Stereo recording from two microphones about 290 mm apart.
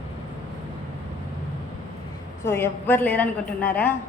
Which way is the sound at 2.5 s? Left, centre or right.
Centre.